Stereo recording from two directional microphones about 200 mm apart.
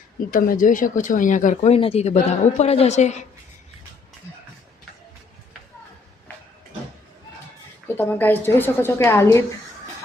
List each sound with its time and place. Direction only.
0.3 s speech: 45° left (ahead or behind)
7.9 s a woman's voice: 10° left (ahead or behind)